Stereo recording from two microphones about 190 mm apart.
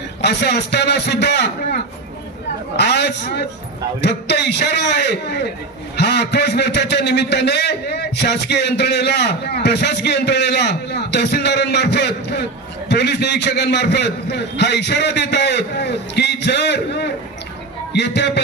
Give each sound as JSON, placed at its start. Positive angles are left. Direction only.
{"t": 0.2, "sound": "a man's voice", "side_deg": 60}